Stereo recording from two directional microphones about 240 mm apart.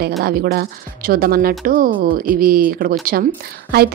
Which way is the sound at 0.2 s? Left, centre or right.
Right.